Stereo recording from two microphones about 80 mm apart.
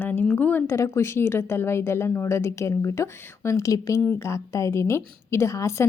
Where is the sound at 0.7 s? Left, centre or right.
Left.